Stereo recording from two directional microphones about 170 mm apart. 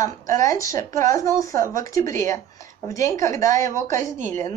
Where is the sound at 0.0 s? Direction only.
45° right (ahead or behind).